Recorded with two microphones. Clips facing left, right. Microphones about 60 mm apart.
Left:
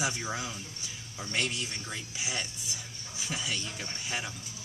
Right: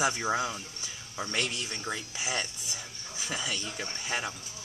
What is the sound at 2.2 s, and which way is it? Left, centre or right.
Speech, right.